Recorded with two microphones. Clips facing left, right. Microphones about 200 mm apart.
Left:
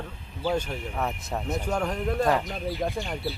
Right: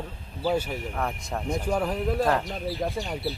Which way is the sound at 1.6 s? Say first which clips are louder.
Right 2 dB; 5° right (ahead or behind).